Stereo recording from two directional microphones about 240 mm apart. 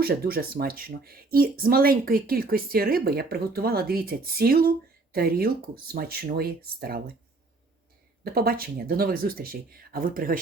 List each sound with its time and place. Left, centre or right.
0.0 s speech: right
8.2 s speech: right